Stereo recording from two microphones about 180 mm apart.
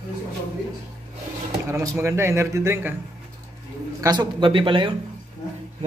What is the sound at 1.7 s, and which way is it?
A man's voice, 15° right (ahead or behind).